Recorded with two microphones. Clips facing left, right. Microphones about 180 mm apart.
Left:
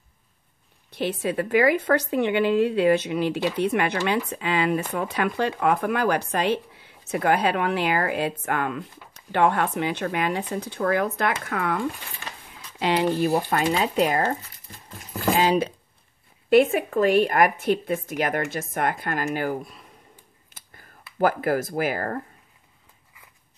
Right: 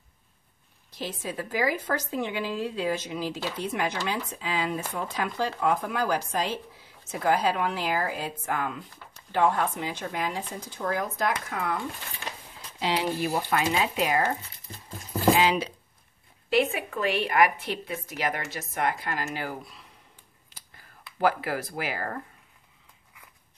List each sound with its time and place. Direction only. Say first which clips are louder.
0.9 s a woman's voice: left 8 dB; 65° left (ahead or behind); by 14.2 s 45° left (ahead or behind)
15.3 s speech: left 3 dB; 35° left (ahead or behind)
16.4 s a woman's voice: left 7 dB; 50° left (ahead or behind)
21.2 s a woman's voice: left 4 dB; 50° left (ahead or behind)